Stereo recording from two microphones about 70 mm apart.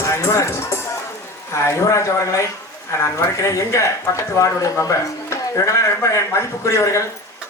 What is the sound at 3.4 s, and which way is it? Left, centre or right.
Speech, left.